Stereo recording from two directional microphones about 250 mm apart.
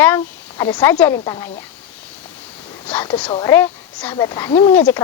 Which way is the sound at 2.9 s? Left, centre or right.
Centre.